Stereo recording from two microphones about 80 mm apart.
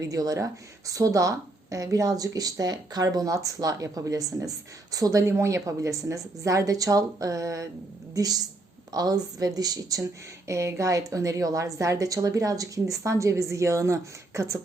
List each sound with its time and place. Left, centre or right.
0.0 s a woman's voice: right
10.0 s a woman's voice: right